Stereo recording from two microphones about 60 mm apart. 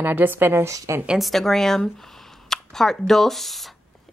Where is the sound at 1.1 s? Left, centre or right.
Centre.